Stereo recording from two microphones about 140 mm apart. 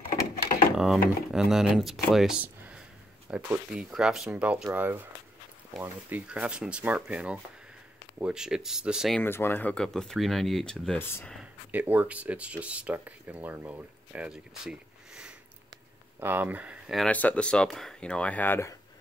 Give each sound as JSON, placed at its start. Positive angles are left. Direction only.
{"t": 0.7, "sound": "speech", "side_deg": -5}
{"t": 9.2, "sound": "speech", "side_deg": 15}
{"t": 11.0, "sound": "speech", "side_deg": 15}
{"t": 11.7, "sound": "speech", "side_deg": -10}
{"t": 17.1, "sound": "speech", "side_deg": 10}